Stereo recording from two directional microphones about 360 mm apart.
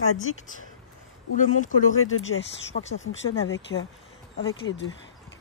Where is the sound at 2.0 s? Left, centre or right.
Left.